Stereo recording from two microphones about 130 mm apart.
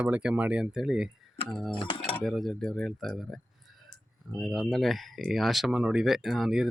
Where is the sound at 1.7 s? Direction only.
40° left (ahead or behind).